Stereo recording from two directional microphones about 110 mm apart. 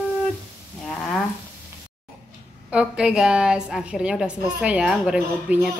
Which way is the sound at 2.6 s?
10° right (ahead or behind).